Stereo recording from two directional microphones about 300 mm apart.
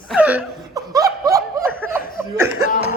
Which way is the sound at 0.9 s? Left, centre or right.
Centre.